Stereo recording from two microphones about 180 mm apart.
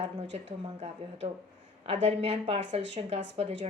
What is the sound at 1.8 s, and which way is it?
A woman's voice, 35° right (ahead or behind).